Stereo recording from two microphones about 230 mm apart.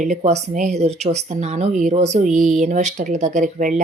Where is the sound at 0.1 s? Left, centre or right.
Right.